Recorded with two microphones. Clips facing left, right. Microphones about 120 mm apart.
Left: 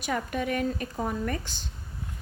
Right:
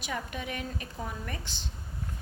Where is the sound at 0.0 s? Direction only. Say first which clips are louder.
Left 7 dB; 50° left (ahead or behind).